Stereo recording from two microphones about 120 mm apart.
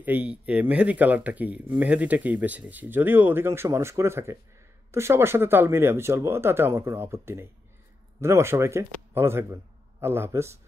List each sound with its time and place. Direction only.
0.0 s speech: 10° right (ahead or behind)